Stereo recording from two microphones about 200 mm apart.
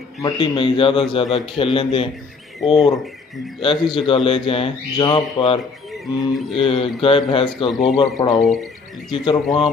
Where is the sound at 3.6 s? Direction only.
25° left (ahead or behind).